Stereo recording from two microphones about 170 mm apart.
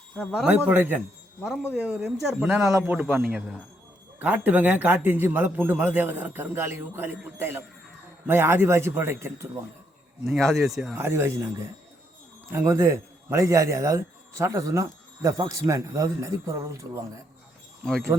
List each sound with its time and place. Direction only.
0.2 s a man's voice: 5° left (ahead or behind)
0.4 s a man's voice: 10° right (ahead or behind)
2.6 s a man's voice: 15° right (ahead or behind)
10.2 s a man's voice: centre (ahead or behind)
10.9 s a man's voice: 15° right (ahead or behind)